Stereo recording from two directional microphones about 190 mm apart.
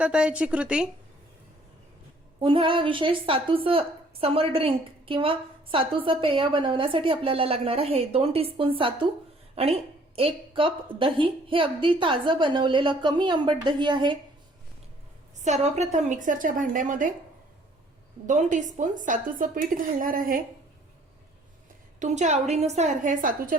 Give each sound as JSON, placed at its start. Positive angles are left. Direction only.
{"t": 0.0, "sound": "a woman's voice", "side_deg": -5}
{"t": 2.4, "sound": "a woman's voice", "side_deg": -30}
{"t": 15.4, "sound": "a woman's voice", "side_deg": -35}
{"t": 18.3, "sound": "a woman's voice", "side_deg": -40}
{"t": 21.9, "sound": "a woman's voice", "side_deg": -40}